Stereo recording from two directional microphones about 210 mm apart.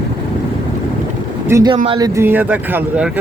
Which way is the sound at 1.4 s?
15° right (ahead or behind).